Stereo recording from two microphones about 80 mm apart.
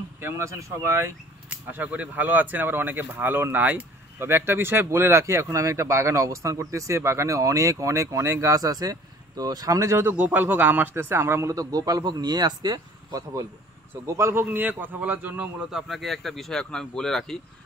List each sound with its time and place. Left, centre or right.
0.2 s speech: right
1.5 s speech: centre; by 9.9 s right
9.9 s speech: right
14.0 s speech: right
15.7 s speech: centre